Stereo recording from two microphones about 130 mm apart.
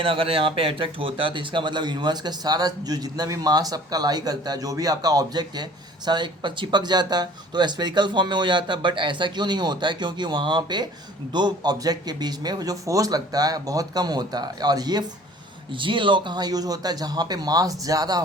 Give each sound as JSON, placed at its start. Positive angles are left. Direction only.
{"t": 0.0, "sound": "speech", "side_deg": -45}